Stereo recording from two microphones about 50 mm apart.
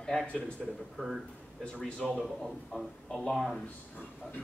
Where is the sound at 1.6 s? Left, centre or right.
Centre.